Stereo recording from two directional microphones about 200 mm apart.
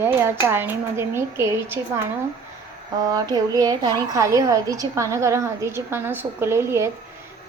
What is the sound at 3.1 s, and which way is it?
A woman's voice, 20° right (ahead or behind).